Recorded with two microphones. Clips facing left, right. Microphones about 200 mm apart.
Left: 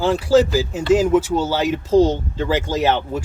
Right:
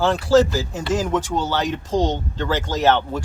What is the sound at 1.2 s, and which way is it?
Speech, 5° left (ahead or behind).